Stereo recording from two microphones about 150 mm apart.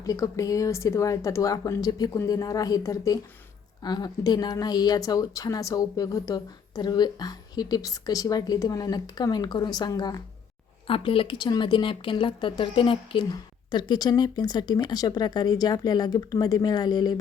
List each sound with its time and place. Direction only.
0.0 s a woman's voice: 20° left (ahead or behind)
10.8 s a woman's voice: 35° left (ahead or behind)